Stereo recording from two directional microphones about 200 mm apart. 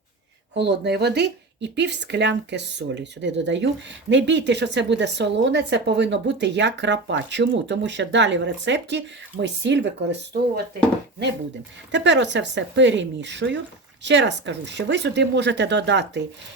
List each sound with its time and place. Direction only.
0.5 s speech: 60° right (ahead or behind)
11.9 s speech: 65° right (ahead or behind)